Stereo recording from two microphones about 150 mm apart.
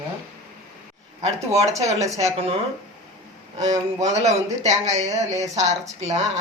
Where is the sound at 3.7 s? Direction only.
45° right (ahead or behind).